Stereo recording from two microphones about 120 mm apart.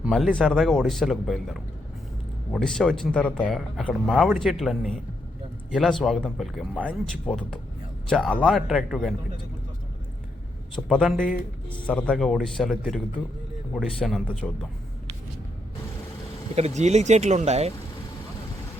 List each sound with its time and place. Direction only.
0.0 s speech: centre (ahead or behind)
10.8 s speech: centre (ahead or behind)
16.6 s speech: 70° right (ahead or behind)